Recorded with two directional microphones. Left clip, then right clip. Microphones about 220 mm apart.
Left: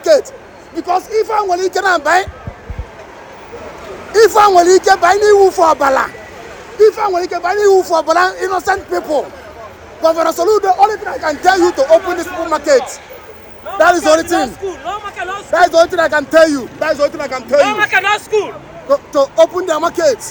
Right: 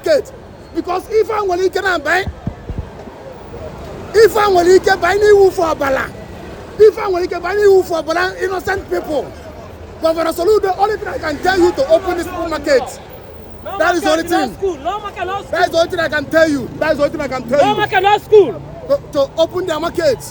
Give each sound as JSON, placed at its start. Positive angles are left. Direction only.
{"t": 0.0, "sound": "a sound", "side_deg": -5}
{"t": 0.8, "sound": "a man's voice", "side_deg": -10}
{"t": 4.1, "sound": "a man's voice", "side_deg": -5}
{"t": 15.5, "sound": "speech", "side_deg": 0}
{"t": 16.8, "sound": "speech", "side_deg": -20}
{"t": 17.6, "sound": "speech", "side_deg": -40}
{"t": 18.9, "sound": "a man's voice", "side_deg": 0}